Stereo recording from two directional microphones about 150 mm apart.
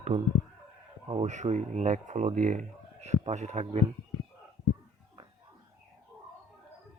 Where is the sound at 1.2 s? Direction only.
50° right (ahead or behind).